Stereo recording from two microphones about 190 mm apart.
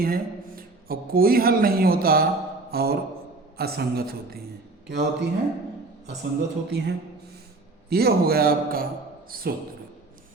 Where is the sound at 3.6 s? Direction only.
55° right (ahead or behind).